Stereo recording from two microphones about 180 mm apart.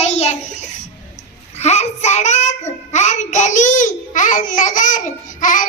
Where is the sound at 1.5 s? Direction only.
35° left (ahead or behind).